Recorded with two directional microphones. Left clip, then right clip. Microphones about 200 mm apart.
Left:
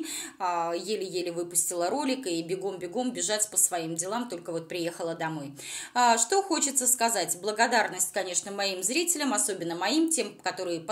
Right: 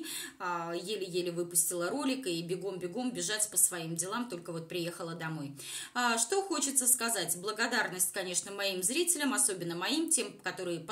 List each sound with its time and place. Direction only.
0.4 s a woman's voice: 20° left (ahead or behind)